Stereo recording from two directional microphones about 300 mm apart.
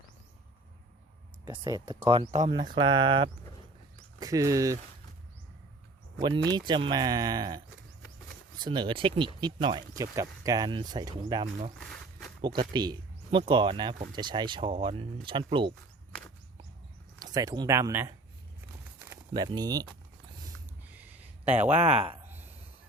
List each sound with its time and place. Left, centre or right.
1.5 s speech: centre
6.1 s speech: centre
11.8 s a sound: centre
12.5 s speech: centre
17.2 s speech: centre
20.9 s a sound: centre